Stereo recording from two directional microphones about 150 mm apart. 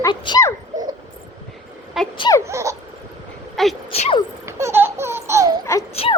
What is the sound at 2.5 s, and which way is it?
Laughter, 20° right (ahead or behind).